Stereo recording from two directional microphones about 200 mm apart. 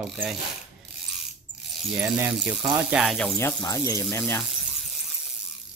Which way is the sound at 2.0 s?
10° right (ahead or behind).